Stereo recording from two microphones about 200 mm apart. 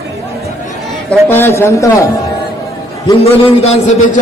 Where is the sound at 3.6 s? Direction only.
30° left (ahead or behind).